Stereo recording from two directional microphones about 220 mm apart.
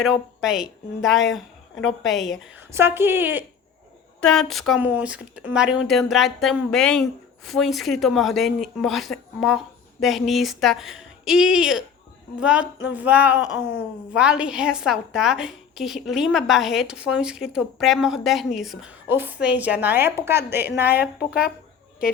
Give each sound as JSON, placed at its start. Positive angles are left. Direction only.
{"t": 0.0, "sound": "a woman's voice", "side_deg": 0}
{"t": 4.2, "sound": "a woman's voice", "side_deg": 5}
{"t": 13.4, "sound": "a sound", "side_deg": 55}
{"t": 14.1, "sound": "a woman's voice", "side_deg": -5}